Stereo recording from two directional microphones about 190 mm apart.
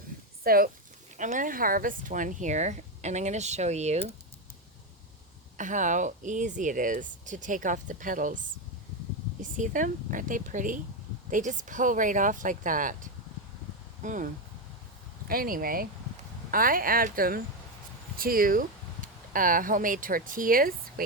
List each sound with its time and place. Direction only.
0.4 s speech: 50° right (ahead or behind)
5.5 s speech: 40° right (ahead or behind)
9.4 s speech: 45° right (ahead or behind)
15.3 s speech: 50° right (ahead or behind)